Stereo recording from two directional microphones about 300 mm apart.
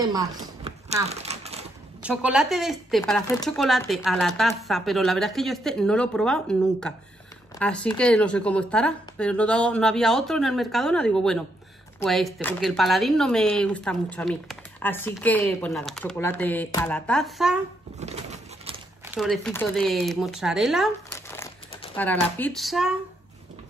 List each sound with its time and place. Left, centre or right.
0.0 s crumpling: centre
2.0 s speech: centre
17.9 s bird: right
19.0 s speech: centre